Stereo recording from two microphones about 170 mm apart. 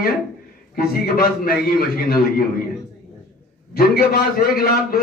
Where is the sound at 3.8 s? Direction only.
60° left (ahead or behind).